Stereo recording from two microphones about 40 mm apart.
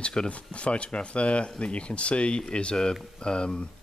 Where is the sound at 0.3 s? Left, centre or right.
Left.